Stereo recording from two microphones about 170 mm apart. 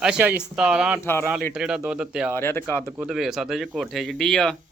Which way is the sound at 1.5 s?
5° right (ahead or behind).